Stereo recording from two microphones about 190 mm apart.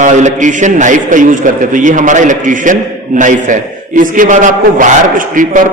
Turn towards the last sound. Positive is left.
turn(degrees=-45)  # may be behind; listen again after turning